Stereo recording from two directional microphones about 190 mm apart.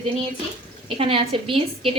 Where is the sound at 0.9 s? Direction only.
30° right (ahead or behind).